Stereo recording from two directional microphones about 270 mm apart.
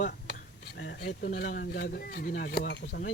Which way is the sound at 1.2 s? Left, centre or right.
Left.